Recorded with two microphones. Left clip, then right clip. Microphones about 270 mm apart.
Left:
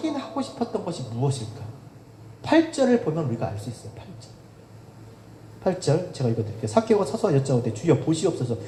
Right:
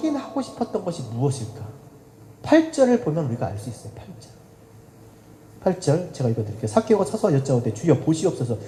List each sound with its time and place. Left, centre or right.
0.0 s speech: right
2.4 s speech: right
5.6 s speech: right